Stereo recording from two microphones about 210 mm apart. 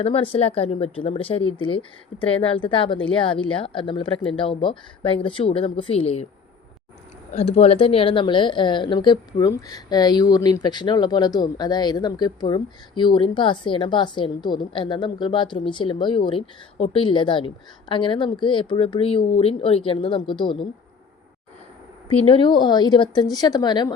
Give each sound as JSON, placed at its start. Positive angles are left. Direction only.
{"t": 0.0, "sound": "speech", "side_deg": 25}
{"t": 7.3, "sound": "speech", "side_deg": 30}
{"t": 22.2, "sound": "speech", "side_deg": 25}